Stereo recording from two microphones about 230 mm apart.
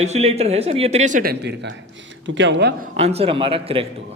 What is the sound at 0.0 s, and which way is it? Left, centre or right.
Speech, right.